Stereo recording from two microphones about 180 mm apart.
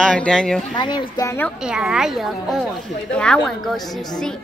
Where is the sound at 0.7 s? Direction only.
25° left (ahead or behind).